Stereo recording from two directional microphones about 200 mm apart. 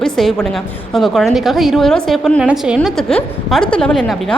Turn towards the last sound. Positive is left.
turn(degrees=5)  # may be behind; listen again after turning